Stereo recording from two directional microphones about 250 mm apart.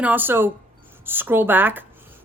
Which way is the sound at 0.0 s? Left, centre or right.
Centre.